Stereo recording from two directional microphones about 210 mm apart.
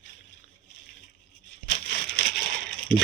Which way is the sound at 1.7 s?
55° left (ahead or behind).